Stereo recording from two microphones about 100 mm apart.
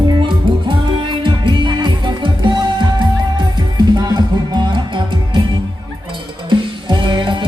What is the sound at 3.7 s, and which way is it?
Music, 45° right (ahead or behind).